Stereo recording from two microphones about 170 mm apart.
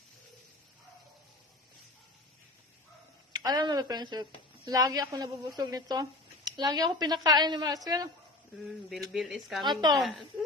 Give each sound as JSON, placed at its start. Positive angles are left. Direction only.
{"t": 3.3, "sound": "speech", "side_deg": -25}
{"t": 9.1, "sound": "speech", "side_deg": 0}
{"t": 9.6, "sound": "speech", "side_deg": -25}